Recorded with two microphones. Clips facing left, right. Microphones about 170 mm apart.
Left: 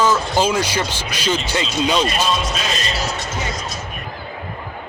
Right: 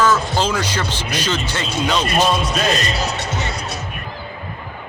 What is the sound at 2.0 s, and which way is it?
Speech, 55° right (ahead or behind).